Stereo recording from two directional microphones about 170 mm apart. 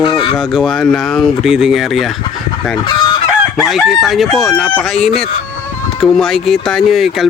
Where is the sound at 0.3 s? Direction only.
Centre (ahead or behind).